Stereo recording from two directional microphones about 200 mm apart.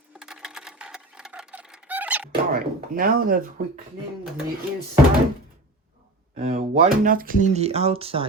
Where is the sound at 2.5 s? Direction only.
45° right (ahead or behind).